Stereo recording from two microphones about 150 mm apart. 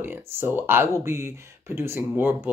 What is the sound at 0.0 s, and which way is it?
Speech, 15° right (ahead or behind).